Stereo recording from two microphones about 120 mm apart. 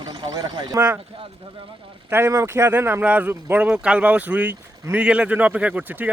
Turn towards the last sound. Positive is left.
turn(degrees=-10)  # may be behind; listen again after turning